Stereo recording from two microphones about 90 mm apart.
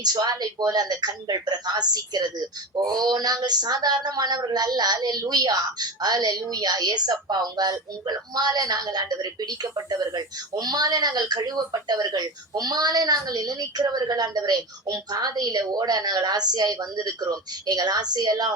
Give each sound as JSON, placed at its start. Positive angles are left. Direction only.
{"t": 0.0, "sound": "speech", "side_deg": -50}